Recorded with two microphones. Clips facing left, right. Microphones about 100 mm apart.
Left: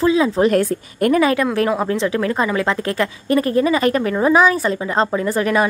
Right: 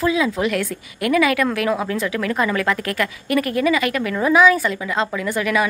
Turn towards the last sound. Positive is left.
turn(degrees=35)  # may be behind; listen again after turning